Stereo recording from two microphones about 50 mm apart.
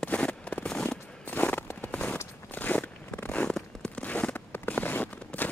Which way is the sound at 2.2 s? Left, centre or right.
Left.